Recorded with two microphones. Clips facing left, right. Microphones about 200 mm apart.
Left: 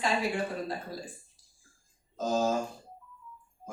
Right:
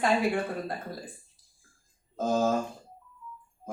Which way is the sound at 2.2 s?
55° right (ahead or behind).